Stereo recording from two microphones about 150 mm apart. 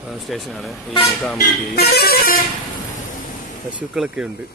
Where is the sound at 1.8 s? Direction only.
90° left.